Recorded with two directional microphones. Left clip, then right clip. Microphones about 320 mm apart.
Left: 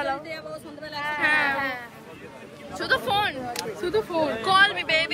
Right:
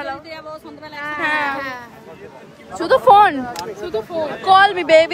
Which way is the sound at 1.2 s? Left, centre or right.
Centre.